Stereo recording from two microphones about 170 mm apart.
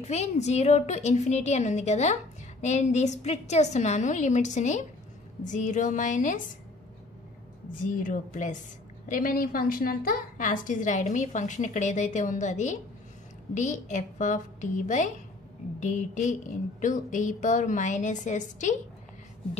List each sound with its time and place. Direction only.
0.0 s a woman's voice: 40° left (ahead or behind)
7.8 s a woman's voice: 50° left (ahead or behind)